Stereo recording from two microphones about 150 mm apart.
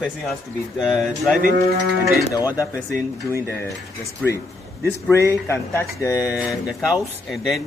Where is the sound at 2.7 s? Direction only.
10° right (ahead or behind).